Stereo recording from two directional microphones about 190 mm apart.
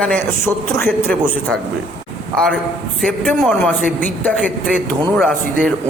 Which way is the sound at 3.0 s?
5° left (ahead or behind).